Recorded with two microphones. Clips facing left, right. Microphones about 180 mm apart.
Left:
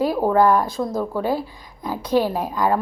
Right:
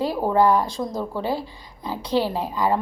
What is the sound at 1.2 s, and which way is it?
Speech, 10° left (ahead or behind).